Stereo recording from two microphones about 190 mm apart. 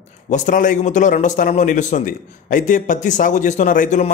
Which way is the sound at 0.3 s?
45° left (ahead or behind).